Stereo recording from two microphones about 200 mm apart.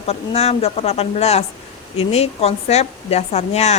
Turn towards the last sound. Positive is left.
turn(degrees=35)  # may be behind; listen again after turning